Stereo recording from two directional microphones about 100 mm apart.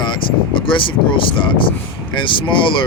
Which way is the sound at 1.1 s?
55° left (ahead or behind).